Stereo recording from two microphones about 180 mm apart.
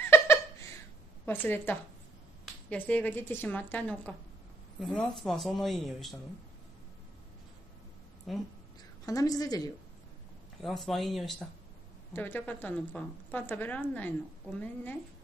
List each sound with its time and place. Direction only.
0.0 s a sound: 15° left (ahead or behind)
1.2 s a woman's voice: 10° left (ahead or behind)
8.3 s speech: centre (ahead or behind)
9.0 s a woman's voice: 20° left (ahead or behind)
10.6 s speech: centre (ahead or behind)
12.1 s a woman's voice: 10° left (ahead or behind)